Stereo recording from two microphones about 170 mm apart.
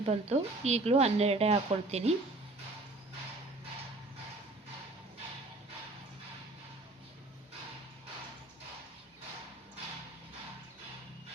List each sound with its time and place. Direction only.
0.0 s speech: 35° right (ahead or behind)